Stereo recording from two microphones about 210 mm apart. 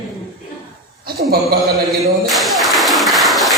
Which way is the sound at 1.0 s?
45° right (ahead or behind).